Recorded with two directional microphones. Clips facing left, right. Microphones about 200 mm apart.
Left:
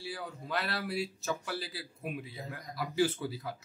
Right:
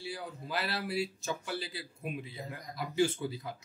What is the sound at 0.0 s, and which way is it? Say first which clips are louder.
Speech: even; centre (ahead or behind).